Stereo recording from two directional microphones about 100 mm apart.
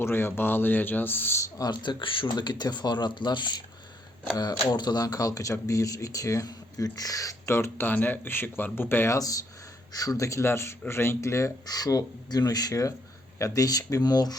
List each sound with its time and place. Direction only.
0.0 s a man's voice: 20° left (ahead or behind)
1.5 s speech: 45° left (ahead or behind)
4.7 s speech: 40° left (ahead or behind); by 9.1 s 20° left (ahead or behind)
9.1 s speech: 35° left (ahead or behind)